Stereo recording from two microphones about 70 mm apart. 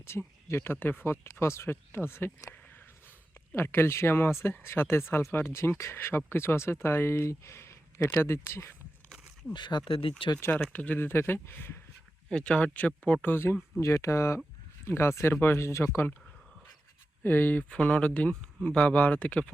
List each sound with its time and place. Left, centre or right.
0.0 s speech: left
3.5 s speech: left
9.5 s speech: left
10.7 s speech: left
12.3 s speech: centre
13.2 s speech: left
13.8 s speech: left
17.2 s speech: left